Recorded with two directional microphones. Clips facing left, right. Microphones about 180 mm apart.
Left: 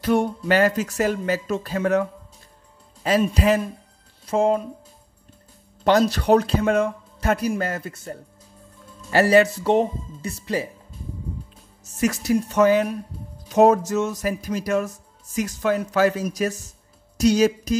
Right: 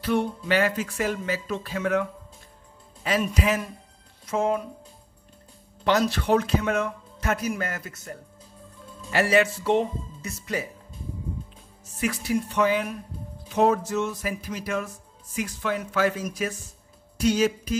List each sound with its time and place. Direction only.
0.0 s speech: 45° left (ahead or behind)
5.9 s speech: 40° left (ahead or behind)
12.0 s speech: 40° left (ahead or behind)